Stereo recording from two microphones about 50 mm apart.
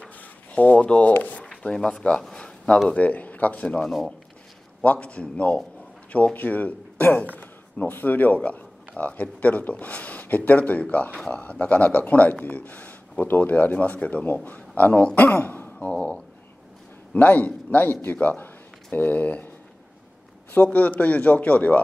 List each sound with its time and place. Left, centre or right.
0.2 s a sound: left
0.8 s speech: left
2.3 s a sound: left
2.9 s a man's voice: left
3.8 s speech: centre
4.8 s speech: left
6.3 s a man's voice: left
11.1 s speech: centre
11.4 s a man's voice: left
15.4 s sigh: left
17.1 s a man's voice: left
20.5 s speech: left